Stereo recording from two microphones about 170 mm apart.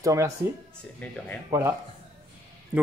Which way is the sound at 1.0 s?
10° left (ahead or behind).